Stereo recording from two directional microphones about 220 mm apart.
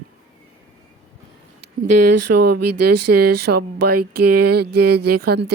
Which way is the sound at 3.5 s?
45° right (ahead or behind).